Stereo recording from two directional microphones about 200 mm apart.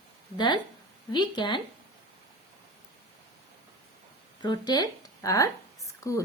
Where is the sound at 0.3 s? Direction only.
20° left (ahead or behind).